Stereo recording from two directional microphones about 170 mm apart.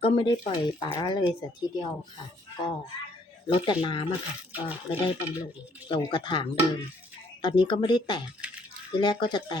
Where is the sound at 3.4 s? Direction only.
30° left (ahead or behind).